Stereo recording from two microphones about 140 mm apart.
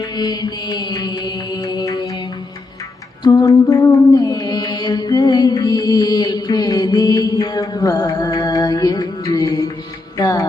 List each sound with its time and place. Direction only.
0.0 s mantra: 30° left (ahead or behind)
3.2 s mantra: 25° left (ahead or behind)
10.2 s music: 25° left (ahead or behind)